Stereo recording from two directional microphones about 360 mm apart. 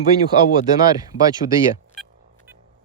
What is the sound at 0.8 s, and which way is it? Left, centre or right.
Speech, centre.